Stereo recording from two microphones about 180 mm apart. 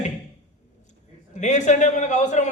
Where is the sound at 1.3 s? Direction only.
40° left (ahead or behind).